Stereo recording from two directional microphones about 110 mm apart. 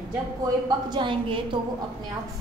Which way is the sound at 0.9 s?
50° right (ahead or behind).